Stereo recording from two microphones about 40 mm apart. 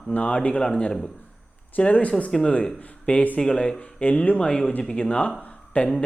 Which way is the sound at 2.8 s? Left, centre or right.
Left.